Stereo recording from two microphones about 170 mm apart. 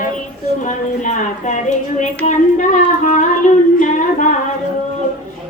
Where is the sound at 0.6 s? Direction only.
45° left (ahead or behind).